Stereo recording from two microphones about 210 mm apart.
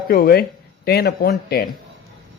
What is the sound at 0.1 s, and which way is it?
Speech, 45° left (ahead or behind).